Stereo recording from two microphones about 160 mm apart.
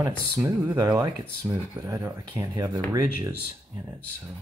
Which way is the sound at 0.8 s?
20° right (ahead or behind).